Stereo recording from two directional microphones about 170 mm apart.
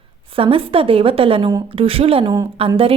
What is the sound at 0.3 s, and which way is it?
Speech, 35° right (ahead or behind).